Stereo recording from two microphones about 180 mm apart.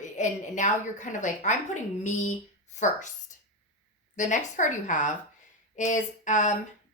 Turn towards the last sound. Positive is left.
turn(degrees=40)  # may be behind; listen again after turning